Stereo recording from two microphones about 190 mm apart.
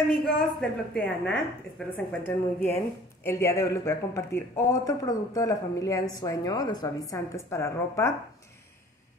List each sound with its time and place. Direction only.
0.1 s a woman's voice: 5° left (ahead or behind)